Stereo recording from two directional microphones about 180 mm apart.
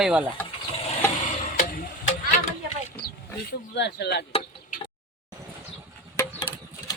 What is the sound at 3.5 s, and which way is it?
Speech, 70° left (ahead or behind).